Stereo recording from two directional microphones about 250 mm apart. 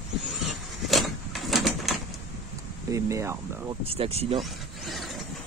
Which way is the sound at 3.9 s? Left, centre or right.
Right.